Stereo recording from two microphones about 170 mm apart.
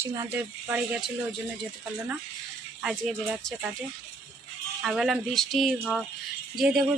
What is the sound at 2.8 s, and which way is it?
Speech, 5° right (ahead or behind).